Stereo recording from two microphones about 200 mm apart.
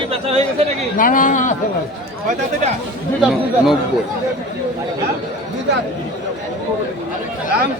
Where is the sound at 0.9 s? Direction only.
40° left (ahead or behind).